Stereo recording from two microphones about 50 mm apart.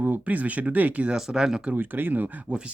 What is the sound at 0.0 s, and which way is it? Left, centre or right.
Speech, right.